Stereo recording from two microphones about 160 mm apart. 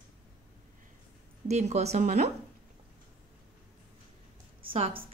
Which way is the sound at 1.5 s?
45° right (ahead or behind).